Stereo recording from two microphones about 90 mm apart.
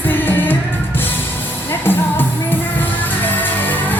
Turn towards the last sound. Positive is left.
turn(degrees=20)  # may be behind; listen again after turning